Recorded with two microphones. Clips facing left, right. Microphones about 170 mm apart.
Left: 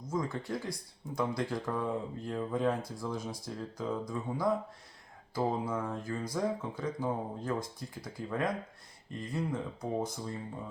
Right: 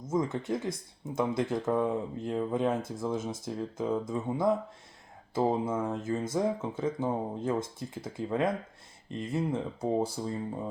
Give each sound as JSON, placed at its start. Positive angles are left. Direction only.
{"t": 0.0, "sound": "speech", "side_deg": -25}